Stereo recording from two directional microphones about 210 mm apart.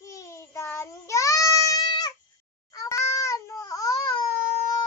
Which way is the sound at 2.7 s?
15° left (ahead or behind).